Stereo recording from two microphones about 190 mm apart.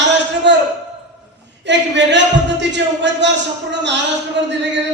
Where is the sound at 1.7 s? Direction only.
70° right (ahead or behind).